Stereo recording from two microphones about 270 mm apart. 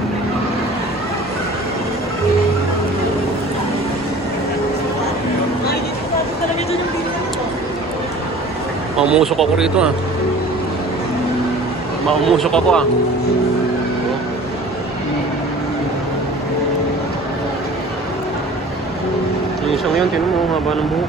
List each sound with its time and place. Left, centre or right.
8.9 s speech: centre
12.1 s speech: centre